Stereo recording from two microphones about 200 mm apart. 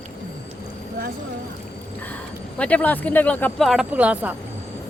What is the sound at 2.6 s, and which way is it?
Speech, 5° left (ahead or behind).